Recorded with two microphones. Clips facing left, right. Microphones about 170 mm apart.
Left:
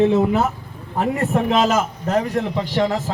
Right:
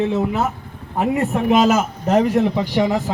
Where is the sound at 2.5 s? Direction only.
10° right (ahead or behind).